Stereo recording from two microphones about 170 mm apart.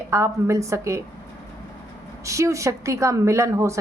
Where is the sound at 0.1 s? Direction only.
15° right (ahead or behind).